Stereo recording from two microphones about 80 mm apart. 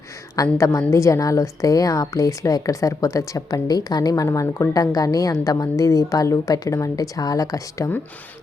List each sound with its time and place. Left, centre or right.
0.5 s a woman's voice: left